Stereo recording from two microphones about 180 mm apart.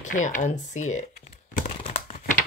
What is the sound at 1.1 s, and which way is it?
Crumpling, 50° left (ahead or behind).